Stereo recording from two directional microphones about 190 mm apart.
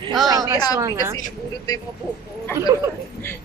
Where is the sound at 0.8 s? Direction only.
15° right (ahead or behind).